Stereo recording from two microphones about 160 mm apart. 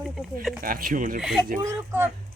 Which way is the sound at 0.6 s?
65° right (ahead or behind).